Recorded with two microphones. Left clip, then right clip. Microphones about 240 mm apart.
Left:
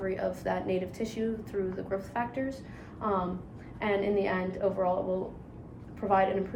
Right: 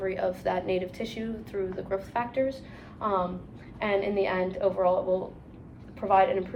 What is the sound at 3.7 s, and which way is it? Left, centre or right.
A woman's voice, centre.